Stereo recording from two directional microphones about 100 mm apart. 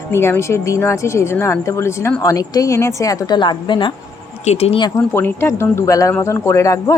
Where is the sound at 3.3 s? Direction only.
50° left (ahead or behind).